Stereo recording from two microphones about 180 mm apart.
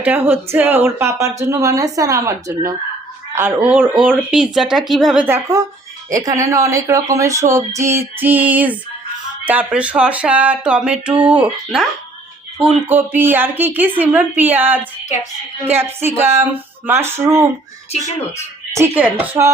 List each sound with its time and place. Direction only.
0.0 s speech: 10° right (ahead or behind)
12.6 s speech: 10° right (ahead or behind)
18.8 s speech: 10° right (ahead or behind)